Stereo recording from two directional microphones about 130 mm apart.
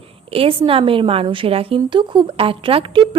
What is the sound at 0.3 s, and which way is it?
A woman's voice, 45° right (ahead or behind).